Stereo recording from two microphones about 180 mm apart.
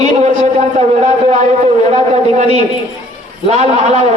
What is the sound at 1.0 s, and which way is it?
A man's voice, 40° right (ahead or behind).